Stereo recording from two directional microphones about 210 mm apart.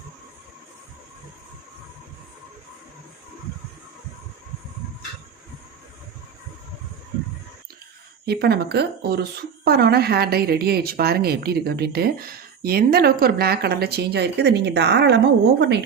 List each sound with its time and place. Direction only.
8.3 s a woman's voice: 50° right (ahead or behind)